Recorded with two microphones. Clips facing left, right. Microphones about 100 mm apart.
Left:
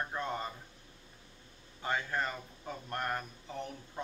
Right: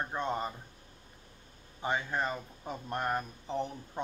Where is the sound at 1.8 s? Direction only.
20° right (ahead or behind).